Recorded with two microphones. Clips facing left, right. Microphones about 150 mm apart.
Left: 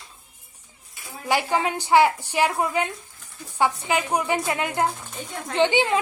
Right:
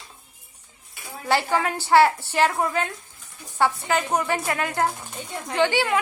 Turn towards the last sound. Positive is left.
turn(degrees=20)  # may be behind; listen again after turning